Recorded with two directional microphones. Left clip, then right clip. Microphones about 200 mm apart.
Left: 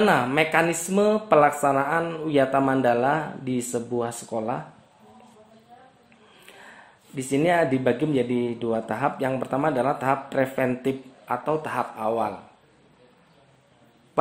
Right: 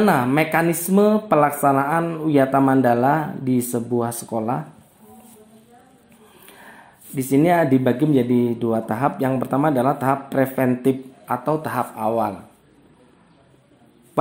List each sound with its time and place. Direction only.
0.0 s speech: 20° right (ahead or behind)
6.4 s speech: 25° right (ahead or behind)